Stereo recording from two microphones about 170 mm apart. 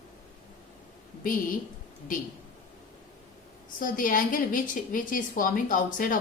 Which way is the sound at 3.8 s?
55° left (ahead or behind).